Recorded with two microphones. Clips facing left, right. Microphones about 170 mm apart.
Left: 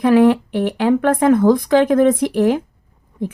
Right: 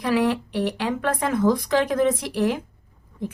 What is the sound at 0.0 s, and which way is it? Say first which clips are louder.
Speech: left 9 dB; 50° left (ahead or behind).